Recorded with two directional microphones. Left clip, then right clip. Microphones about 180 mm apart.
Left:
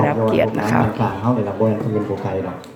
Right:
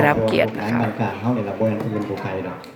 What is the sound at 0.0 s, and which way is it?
Speech, centre (ahead or behind).